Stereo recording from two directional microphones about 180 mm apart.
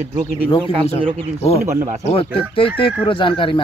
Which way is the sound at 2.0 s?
30° left (ahead or behind).